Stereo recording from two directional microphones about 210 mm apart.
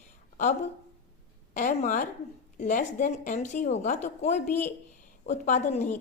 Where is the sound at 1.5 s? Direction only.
40° left (ahead or behind).